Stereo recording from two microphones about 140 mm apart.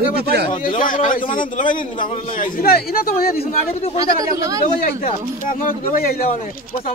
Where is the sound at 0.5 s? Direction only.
70° left (ahead or behind); by 3.4 s 90° left.